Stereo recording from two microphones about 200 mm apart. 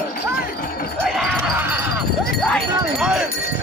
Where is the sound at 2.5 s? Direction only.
Centre (ahead or behind).